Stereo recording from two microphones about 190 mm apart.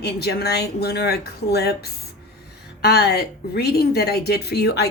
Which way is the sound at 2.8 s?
55° left (ahead or behind).